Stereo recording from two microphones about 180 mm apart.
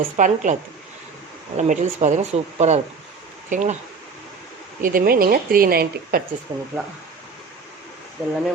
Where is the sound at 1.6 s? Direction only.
40° right (ahead or behind).